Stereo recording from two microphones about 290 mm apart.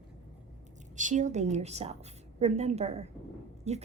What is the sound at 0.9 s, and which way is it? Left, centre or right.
A woman's voice, right.